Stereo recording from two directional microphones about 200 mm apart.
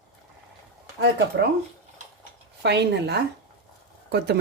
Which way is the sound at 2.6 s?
55° right (ahead or behind).